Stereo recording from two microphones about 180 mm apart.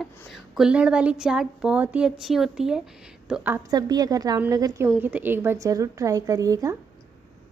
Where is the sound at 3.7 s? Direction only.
20° right (ahead or behind).